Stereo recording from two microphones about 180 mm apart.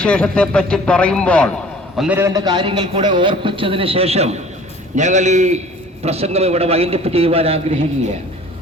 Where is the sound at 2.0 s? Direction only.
10° right (ahead or behind); by 7.8 s 35° right (ahead or behind).